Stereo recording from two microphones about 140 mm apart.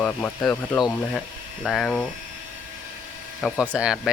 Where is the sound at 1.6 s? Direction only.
5° left (ahead or behind).